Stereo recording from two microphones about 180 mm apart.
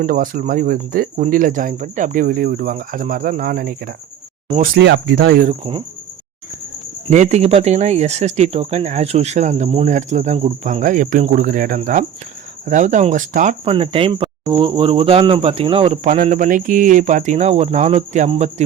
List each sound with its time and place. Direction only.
0.0 s speech: 50° right (ahead or behind)
4.8 s speech: 70° right (ahead or behind)
5.5 s speech: 30° right (ahead or behind)
7.1 s speech: 40° right (ahead or behind)
16.0 s speech: 40° right (ahead or behind)